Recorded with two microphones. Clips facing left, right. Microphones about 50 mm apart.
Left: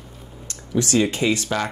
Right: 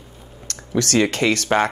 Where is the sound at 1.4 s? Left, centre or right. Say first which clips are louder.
Right 6 dB; right.